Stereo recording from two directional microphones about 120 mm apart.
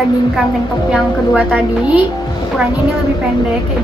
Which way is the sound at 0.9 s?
10° right (ahead or behind).